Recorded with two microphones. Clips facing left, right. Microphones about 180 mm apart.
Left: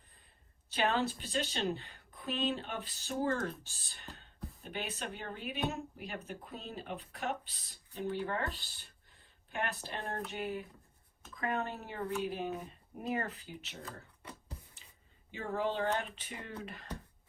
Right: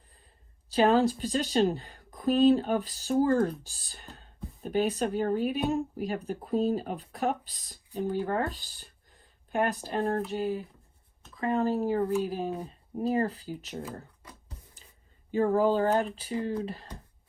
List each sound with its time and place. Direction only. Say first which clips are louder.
0.7 s speech: right 10 dB; 35° right (ahead or behind)
14.8 s a sound: right 4 dB; 40° right (ahead or behind)
15.3 s speech: right 12 dB; 40° right (ahead or behind)